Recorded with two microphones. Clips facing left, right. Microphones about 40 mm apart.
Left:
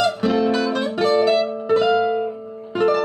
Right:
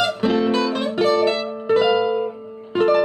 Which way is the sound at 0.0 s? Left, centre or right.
Centre.